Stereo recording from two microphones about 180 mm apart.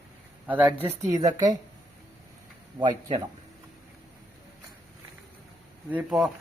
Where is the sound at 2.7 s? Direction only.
25° right (ahead or behind).